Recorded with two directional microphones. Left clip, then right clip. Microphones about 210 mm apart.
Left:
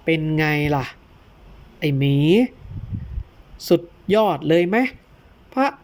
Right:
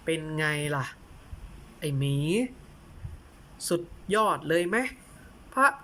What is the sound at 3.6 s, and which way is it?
Speech, 20° left (ahead or behind).